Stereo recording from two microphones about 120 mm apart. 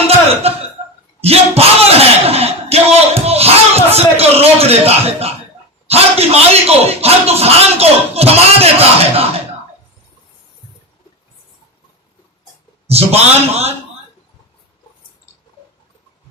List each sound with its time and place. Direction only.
0.4 s speech: 55° right (ahead or behind)
1.2 s bellow: 55° right (ahead or behind)
3.2 s music: 60° right (ahead or behind)
5.9 s a man's voice: 60° right (ahead or behind)
12.9 s a man's voice: 60° right (ahead or behind)